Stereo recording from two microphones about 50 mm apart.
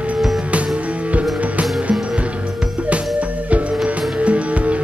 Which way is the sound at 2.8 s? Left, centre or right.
Right.